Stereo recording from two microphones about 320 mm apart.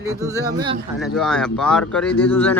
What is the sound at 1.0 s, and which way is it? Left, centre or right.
Speech, centre.